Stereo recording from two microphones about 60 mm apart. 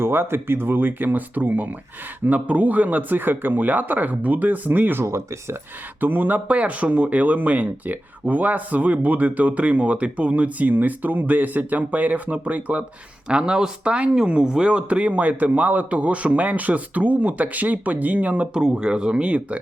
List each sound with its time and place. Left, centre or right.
0.0 s speech: right
5.0 s speech: right
6.0 s speech: right
13.2 s speech: centre
18.5 s speech: centre